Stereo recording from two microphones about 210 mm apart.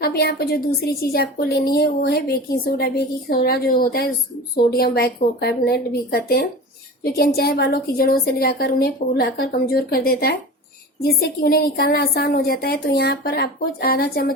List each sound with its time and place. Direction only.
0.0 s a woman's voice: 50° left (ahead or behind)